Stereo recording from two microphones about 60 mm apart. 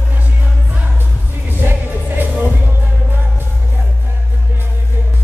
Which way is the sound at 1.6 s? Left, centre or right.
Right.